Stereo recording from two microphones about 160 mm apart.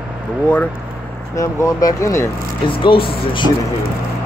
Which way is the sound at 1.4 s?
20° left (ahead or behind).